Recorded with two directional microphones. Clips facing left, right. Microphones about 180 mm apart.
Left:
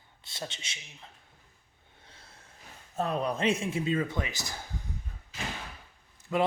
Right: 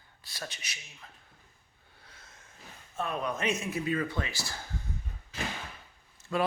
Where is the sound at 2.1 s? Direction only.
30° left (ahead or behind).